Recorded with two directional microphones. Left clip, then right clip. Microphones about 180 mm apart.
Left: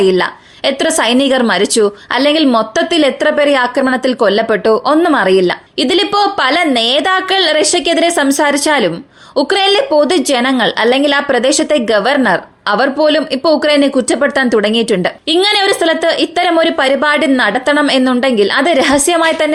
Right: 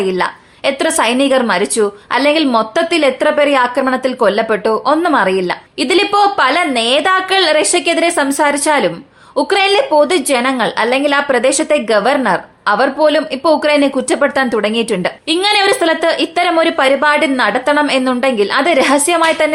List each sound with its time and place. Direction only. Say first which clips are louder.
0.0 s a woman's voice: left 4 dB; 30° left (ahead or behind)